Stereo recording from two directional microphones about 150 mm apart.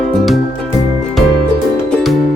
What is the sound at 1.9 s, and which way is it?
Music, centre (ahead or behind).